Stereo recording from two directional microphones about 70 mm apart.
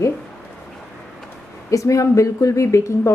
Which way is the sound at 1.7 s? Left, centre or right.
Left.